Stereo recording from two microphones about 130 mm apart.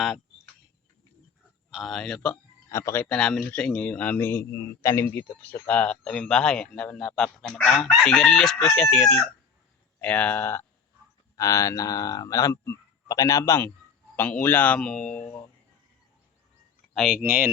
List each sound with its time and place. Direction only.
1.7 s chicken: centre (ahead or behind)
2.3 s speech: 20° left (ahead or behind)
8.0 s chicken: 5° left (ahead or behind)
10.0 s a man's voice: 10° left (ahead or behind)
16.9 s speech: centre (ahead or behind)
17.2 s speech: 15° right (ahead or behind)